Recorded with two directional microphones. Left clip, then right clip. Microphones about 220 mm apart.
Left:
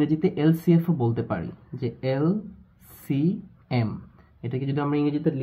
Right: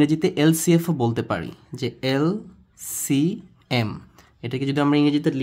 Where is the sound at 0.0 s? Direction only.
30° right (ahead or behind).